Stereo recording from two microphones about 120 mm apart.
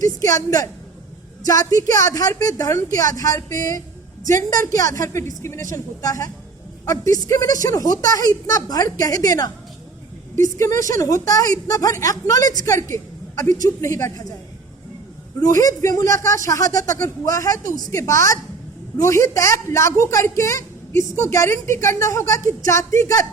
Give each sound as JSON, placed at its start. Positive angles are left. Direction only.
{"t": 0.0, "sound": "a woman's voice", "side_deg": 30}
{"t": 10.8, "sound": "speech", "side_deg": -90}
{"t": 11.0, "sound": "a woman's voice", "side_deg": 30}
{"t": 15.4, "sound": "a woman's voice", "side_deg": 30}